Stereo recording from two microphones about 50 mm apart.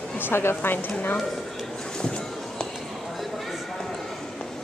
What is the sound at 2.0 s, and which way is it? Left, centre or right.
Music, centre.